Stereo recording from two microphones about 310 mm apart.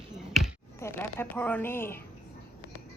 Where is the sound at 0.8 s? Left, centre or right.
Centre.